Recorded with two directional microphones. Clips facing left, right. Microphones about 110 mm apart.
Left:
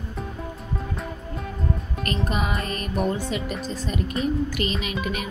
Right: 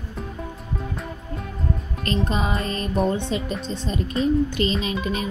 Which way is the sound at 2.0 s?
30° right (ahead or behind).